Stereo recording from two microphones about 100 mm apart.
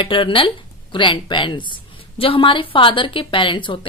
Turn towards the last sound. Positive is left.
turn(degrees=55)  # may be behind; listen again after turning